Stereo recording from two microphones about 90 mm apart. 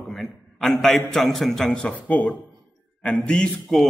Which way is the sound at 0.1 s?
Centre (ahead or behind).